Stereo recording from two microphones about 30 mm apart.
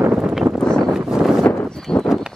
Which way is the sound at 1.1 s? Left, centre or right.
Centre.